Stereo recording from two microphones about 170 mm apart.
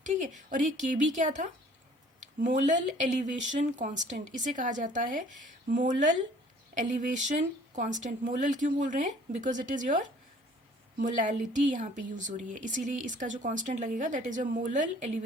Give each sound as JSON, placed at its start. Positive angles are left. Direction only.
{"t": 0.0, "sound": "speech", "side_deg": -45}